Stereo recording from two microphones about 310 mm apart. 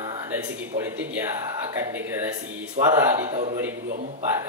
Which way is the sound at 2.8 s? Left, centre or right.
Right.